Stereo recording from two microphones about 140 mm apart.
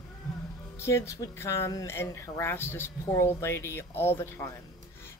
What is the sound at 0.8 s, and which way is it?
Speech, 20° left (ahead or behind).